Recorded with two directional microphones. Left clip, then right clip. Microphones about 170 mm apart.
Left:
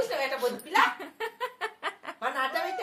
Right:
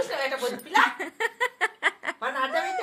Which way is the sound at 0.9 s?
45° right (ahead or behind).